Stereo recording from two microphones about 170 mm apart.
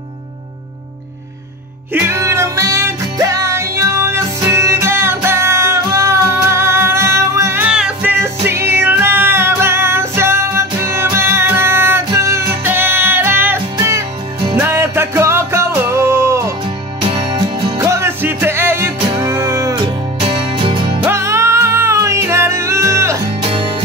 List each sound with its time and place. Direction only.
2.0 s music: 15° right (ahead or behind)
17.0 s music: 30° right (ahead or behind)
17.8 s music: 15° right (ahead or behind)
20.2 s music: 30° right (ahead or behind)
21.0 s music: 15° right (ahead or behind)